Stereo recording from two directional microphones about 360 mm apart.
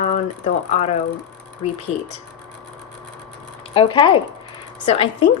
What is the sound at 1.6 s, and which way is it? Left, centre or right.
Speech, centre.